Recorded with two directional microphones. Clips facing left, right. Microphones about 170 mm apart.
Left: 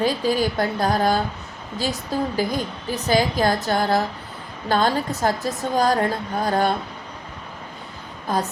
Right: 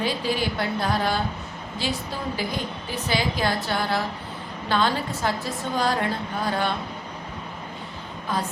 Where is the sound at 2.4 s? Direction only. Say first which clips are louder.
Left 5 dB; 45° left (ahead or behind).